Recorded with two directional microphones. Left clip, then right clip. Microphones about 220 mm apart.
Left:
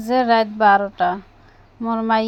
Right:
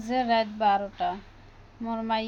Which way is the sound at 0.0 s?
35° left (ahead or behind).